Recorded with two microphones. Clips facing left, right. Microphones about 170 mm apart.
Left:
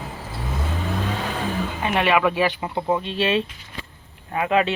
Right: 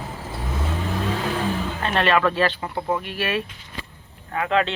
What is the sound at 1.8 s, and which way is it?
Speech, 10° left (ahead or behind).